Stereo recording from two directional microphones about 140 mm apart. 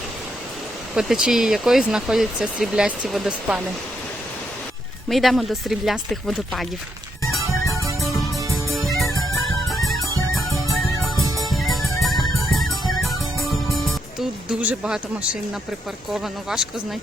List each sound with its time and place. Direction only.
0.9 s speech: 5° right (ahead or behind)
5.0 s speech: centre (ahead or behind)
8.4 s music: 20° right (ahead or behind)
11.4 s music: centre (ahead or behind)
14.2 s speech: 10° right (ahead or behind)